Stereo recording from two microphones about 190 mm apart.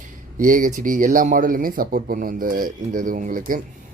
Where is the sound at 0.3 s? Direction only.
45° right (ahead or behind).